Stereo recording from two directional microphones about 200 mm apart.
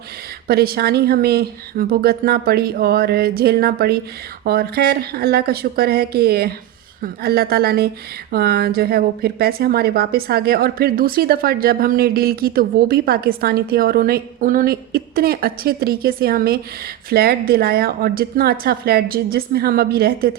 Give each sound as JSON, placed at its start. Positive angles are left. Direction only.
{"t": 0.4, "sound": "a woman's voice", "side_deg": -50}